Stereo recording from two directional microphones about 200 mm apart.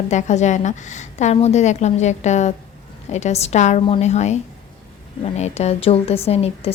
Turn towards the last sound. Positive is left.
turn(degrees=30)  # may be behind; listen again after turning